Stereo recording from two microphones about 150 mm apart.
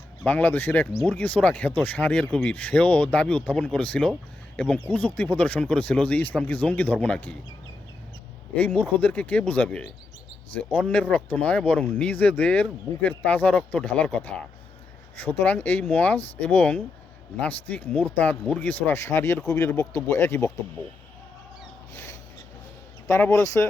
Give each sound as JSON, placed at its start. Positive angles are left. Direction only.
{"t": 0.3, "sound": "speech", "side_deg": 10}
{"t": 8.5, "sound": "speech", "side_deg": 10}
{"t": 21.9, "sound": "a sound", "side_deg": 20}
{"t": 23.0, "sound": "speech", "side_deg": 15}